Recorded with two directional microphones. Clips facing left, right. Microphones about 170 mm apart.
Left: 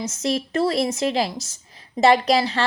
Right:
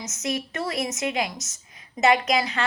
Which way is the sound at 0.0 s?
30° left (ahead or behind).